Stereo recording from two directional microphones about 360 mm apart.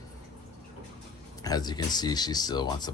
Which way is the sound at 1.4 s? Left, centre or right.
Centre.